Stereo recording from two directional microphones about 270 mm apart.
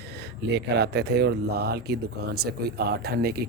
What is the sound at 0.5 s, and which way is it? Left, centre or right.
Speech, right.